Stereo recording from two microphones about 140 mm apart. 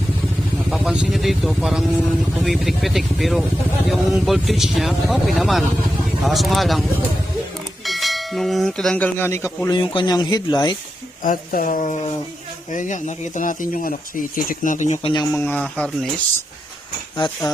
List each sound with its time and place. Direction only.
0.7 s vehicle: 5° right (ahead or behind)
2.4 s speech: centre (ahead or behind)
7.9 s speech: centre (ahead or behind); by 9.6 s 15° left (ahead or behind)
9.6 s speech: 35° left (ahead or behind)
11.2 s speech: 75° left (ahead or behind)
15.0 s speech: 35° left (ahead or behind)
15.3 s speech: 15° left (ahead or behind)
17.2 s speech: 30° left (ahead or behind)